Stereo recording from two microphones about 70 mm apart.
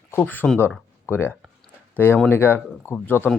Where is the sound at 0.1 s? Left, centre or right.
Left.